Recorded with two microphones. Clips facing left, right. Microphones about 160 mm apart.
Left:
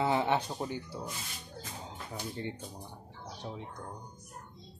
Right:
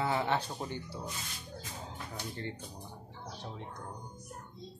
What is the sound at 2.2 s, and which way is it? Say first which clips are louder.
Speech: left 3 dB; 15° left (ahead or behind).